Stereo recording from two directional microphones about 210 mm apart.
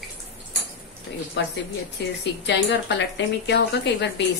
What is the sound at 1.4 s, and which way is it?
Speech, 55° left (ahead or behind).